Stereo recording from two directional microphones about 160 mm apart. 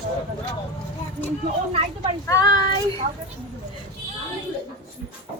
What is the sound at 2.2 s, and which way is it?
Speech, 20° left (ahead or behind).